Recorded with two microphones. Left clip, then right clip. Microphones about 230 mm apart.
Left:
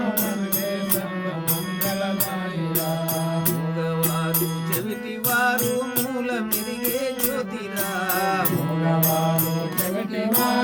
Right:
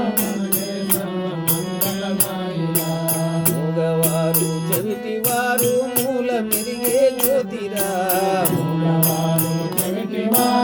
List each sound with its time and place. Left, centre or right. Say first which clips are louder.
5.3 s music: even; centre
6.9 s music: right 11 dB; centre